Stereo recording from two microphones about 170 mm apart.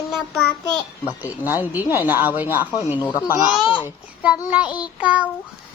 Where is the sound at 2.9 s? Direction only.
25° left (ahead or behind).